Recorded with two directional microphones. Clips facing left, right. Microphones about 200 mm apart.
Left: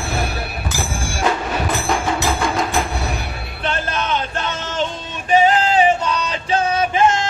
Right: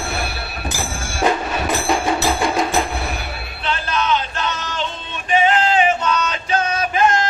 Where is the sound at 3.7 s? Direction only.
50° left (ahead or behind).